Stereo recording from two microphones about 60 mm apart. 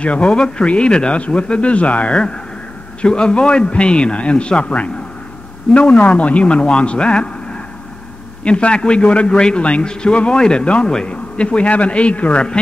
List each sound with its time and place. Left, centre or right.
0.0 s a man's voice: centre
8.5 s a man's voice: centre